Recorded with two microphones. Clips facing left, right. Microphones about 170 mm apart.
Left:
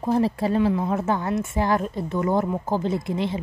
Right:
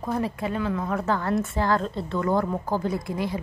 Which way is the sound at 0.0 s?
30° left (ahead or behind).